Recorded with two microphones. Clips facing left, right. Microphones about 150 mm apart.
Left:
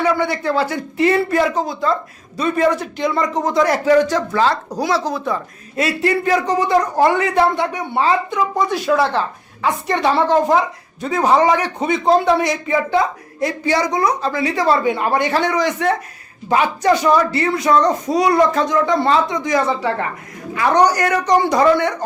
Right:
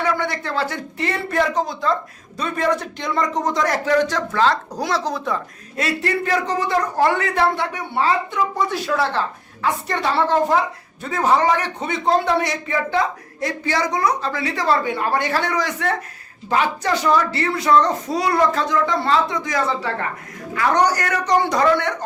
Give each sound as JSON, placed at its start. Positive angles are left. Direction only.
{"t": 0.0, "sound": "speech", "side_deg": 10}